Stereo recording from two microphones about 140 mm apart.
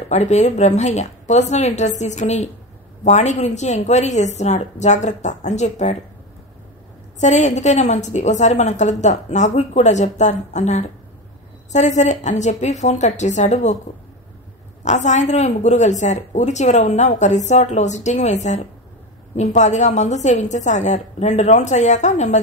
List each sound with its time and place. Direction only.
0.1 s speech: 55° left (ahead or behind)
7.2 s speech: 60° left (ahead or behind)
14.9 s speech: 55° left (ahead or behind)